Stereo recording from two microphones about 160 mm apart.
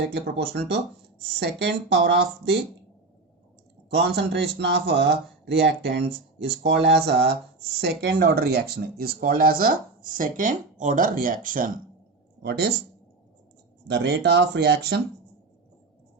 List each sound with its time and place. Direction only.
0.0 s speech: 90° right
3.8 s speech: 90° right; by 11.7 s 60° right (ahead or behind)
12.4 s speech: 90° right
13.8 s speech: 90° right